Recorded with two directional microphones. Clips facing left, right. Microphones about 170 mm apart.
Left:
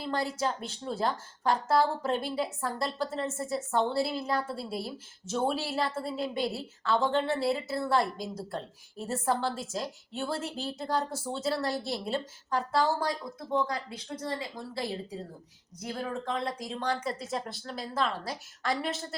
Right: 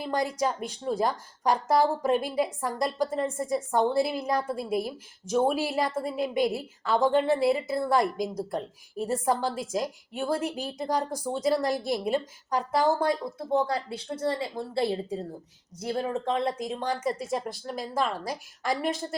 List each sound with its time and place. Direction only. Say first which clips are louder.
0.0 s a woman's voice: right 3 dB; 15° right (ahead or behind)